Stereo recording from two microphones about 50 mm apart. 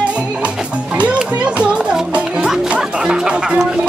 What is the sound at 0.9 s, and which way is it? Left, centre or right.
Music, right.